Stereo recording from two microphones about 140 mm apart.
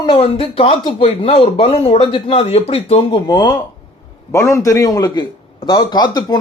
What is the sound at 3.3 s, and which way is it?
A man's voice, 30° left (ahead or behind).